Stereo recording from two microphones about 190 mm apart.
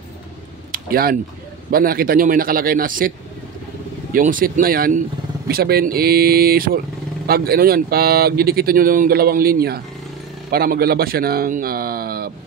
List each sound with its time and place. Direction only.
0.7 s a sound: 50° right (ahead or behind)
1.7 s speech: 50° right (ahead or behind)
4.1 s speech: 45° right (ahead or behind)